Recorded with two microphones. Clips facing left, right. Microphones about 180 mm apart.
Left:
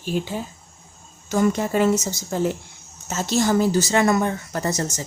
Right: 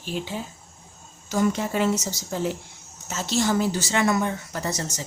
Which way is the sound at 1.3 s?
50° left (ahead or behind).